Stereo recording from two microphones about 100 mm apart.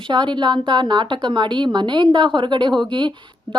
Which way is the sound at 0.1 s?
50° right (ahead or behind).